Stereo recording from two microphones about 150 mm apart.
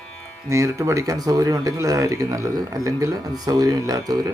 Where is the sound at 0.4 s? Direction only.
20° right (ahead or behind).